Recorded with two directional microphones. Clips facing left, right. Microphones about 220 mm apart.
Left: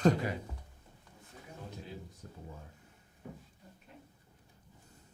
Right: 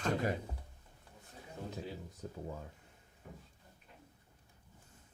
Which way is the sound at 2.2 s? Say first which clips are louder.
Right 6 dB; 90° right.